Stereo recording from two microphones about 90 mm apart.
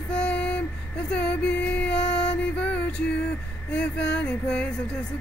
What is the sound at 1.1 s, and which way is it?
Music, 15° left (ahead or behind).